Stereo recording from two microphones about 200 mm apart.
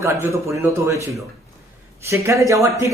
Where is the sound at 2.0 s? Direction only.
15° right (ahead or behind).